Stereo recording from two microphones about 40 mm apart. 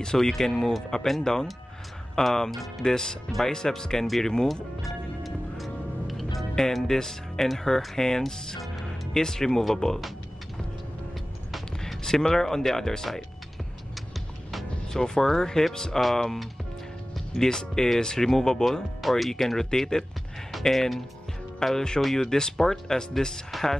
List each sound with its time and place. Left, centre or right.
0.0 s speech: centre
4.8 s music: centre
6.5 s speech: centre
8.5 s music: centre
12.0 s speech: centre
14.9 s speech: centre